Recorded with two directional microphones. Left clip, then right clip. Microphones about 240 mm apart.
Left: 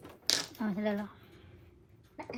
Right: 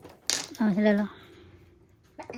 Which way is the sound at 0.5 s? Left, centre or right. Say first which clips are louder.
Right 10 dB; right.